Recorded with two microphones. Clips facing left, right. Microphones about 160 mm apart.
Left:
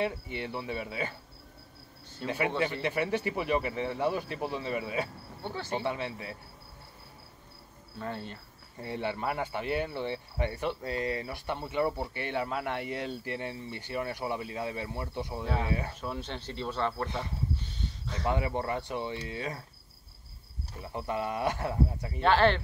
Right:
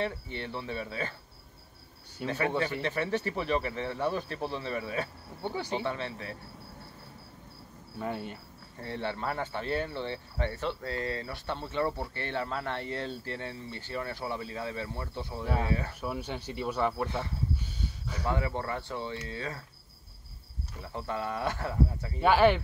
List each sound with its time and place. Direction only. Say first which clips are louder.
0.0 s speech: left 1 dB; 15° left (ahead or behind)
2.2 s speech: even; 15° left (ahead or behind)
5.4 s speech: right 2 dB; 15° right (ahead or behind)
5.9 s speech: left 1 dB; 15° left (ahead or behind)
8.0 s speech: right 2 dB; 15° right (ahead or behind)
8.8 s speech: left 1 dB; 15° left (ahead or behind)
15.9 s speech: right 2 dB; 10° right (ahead or behind)
17.6 s a sound: right 1 dB; 10° right (ahead or behind)
18.2 s speech: left 1 dB; 15° left (ahead or behind)
20.8 s speech: left 2 dB; 15° left (ahead or behind)
22.2 s speech: right 2 dB; 10° right (ahead or behind)